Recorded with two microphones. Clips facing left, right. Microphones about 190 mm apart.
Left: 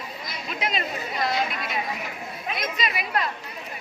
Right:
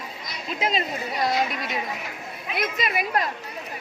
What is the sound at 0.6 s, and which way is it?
Speech, 30° right (ahead or behind).